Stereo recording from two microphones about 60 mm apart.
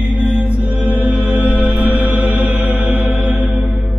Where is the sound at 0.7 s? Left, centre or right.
Right.